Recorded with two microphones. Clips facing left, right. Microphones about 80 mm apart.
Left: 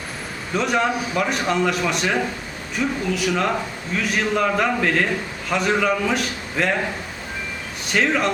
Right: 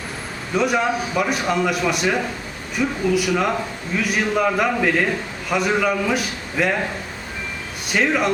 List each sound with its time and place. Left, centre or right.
0.5 s a man's voice: centre
7.9 s a man's voice: centre